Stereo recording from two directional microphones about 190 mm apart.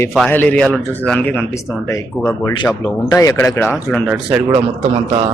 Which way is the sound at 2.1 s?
Centre (ahead or behind).